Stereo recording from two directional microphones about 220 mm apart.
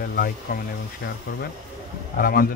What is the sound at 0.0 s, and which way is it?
Speech, 45° left (ahead or behind).